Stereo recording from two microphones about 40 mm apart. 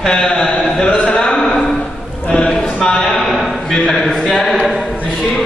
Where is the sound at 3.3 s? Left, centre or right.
Centre.